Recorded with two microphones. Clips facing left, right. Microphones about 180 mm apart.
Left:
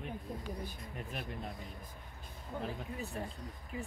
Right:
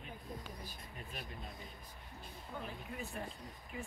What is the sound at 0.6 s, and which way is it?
Speech, 55° left (ahead or behind).